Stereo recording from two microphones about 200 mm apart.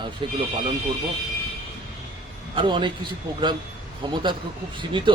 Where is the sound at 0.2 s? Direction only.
25° right (ahead or behind).